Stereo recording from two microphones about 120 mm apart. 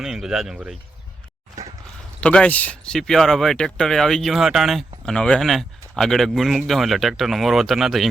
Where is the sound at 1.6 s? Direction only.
30° right (ahead or behind).